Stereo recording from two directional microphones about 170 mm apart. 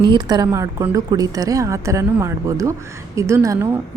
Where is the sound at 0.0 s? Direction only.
25° right (ahead or behind).